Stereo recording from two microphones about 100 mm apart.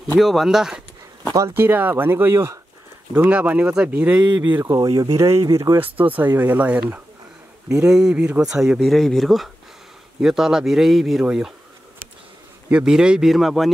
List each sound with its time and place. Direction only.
0.2 s speech: centre (ahead or behind)
1.5 s speech: 20° right (ahead or behind)
3.2 s speech: 15° right (ahead or behind)
4.6 s speech: 40° right (ahead or behind)
5.8 s speech: 15° right (ahead or behind)
12.6 s speech: 10° right (ahead or behind)